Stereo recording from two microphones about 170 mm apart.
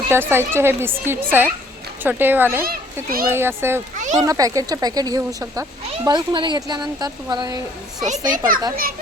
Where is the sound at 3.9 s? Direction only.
45° right (ahead or behind).